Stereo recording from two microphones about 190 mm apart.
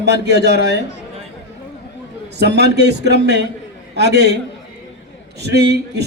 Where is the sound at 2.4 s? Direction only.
60° right (ahead or behind).